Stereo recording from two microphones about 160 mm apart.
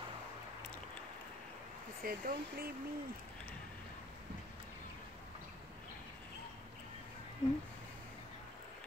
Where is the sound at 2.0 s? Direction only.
65° right (ahead or behind).